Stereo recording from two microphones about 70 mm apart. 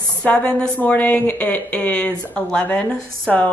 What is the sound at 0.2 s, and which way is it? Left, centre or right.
A woman's voice, centre.